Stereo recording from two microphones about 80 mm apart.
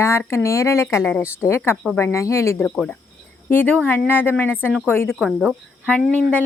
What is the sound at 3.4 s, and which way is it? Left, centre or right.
Speech, left.